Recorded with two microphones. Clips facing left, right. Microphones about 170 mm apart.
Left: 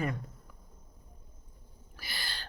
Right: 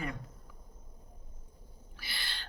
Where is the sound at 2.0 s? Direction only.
40° left (ahead or behind).